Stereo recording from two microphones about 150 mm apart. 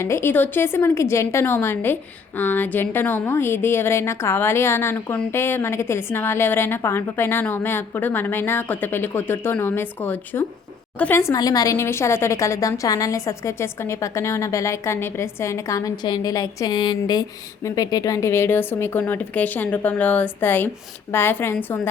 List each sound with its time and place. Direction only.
0.0 s a woman's voice: 15° left (ahead or behind)